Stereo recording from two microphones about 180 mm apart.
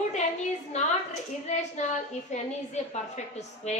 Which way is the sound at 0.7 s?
35° left (ahead or behind).